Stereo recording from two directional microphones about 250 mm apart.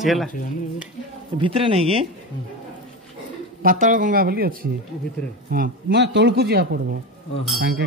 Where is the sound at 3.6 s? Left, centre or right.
Right.